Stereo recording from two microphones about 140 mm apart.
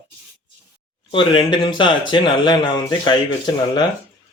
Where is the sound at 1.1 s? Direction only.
35° left (ahead or behind).